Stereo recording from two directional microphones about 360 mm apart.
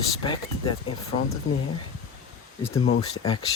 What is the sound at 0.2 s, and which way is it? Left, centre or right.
Speech, centre.